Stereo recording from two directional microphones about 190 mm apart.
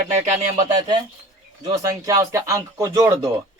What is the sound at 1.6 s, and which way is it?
Speech, 20° right (ahead or behind).